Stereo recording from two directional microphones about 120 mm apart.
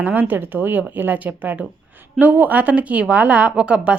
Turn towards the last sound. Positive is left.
turn(degrees=-10)  # may be behind; listen again after turning